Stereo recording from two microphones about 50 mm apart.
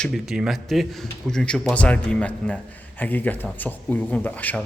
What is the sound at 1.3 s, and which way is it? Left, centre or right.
Speech, centre.